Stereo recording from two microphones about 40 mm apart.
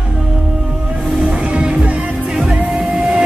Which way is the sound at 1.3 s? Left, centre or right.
Right.